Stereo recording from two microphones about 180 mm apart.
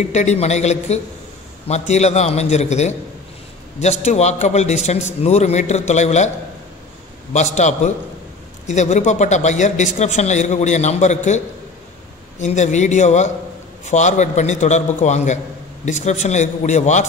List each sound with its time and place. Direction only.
0.1 s a man's voice: 40° left (ahead or behind)
7.3 s a man's voice: 40° left (ahead or behind)